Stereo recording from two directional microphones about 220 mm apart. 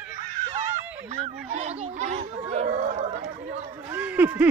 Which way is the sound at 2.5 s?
35° right (ahead or behind).